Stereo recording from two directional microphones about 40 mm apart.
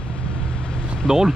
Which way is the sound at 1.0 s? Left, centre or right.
Centre.